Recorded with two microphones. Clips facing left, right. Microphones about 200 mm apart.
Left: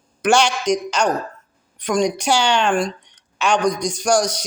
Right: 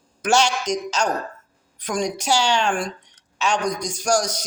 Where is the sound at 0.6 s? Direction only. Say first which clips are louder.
Left 4 dB; 65° left (ahead or behind).